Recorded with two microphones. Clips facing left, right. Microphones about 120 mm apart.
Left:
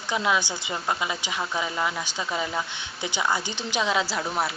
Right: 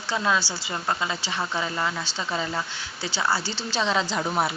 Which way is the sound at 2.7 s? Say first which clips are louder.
Left 1 dB; 20° left (ahead or behind).